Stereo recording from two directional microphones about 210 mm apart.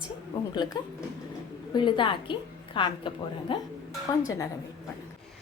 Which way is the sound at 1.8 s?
20° left (ahead or behind).